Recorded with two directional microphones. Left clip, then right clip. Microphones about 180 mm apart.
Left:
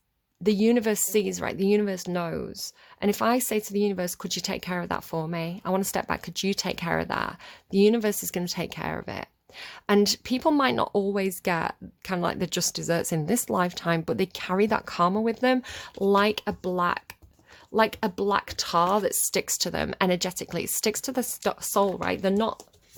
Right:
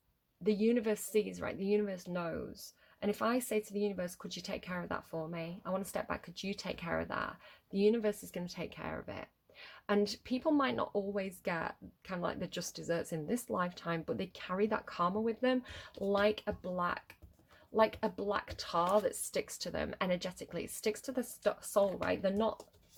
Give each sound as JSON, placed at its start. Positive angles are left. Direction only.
{"t": 0.4, "sound": "speech", "side_deg": 60}